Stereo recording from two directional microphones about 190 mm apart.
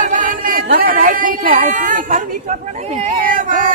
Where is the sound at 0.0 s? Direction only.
45° right (ahead or behind).